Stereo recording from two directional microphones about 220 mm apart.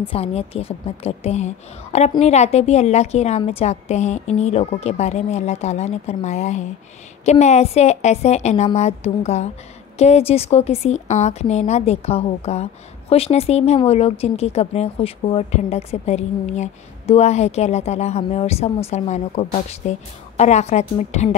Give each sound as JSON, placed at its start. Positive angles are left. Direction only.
{"t": 0.0, "sound": "a woman's voice", "side_deg": 25}